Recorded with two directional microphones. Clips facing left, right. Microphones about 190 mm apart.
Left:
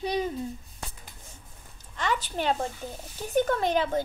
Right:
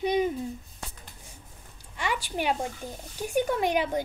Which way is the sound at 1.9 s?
10° right (ahead or behind).